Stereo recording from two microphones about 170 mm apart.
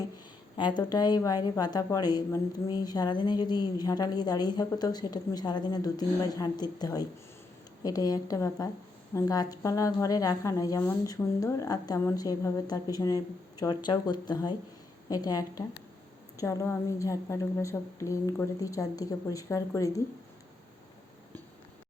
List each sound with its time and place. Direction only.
0.5 s a woman's voice: 25° left (ahead or behind)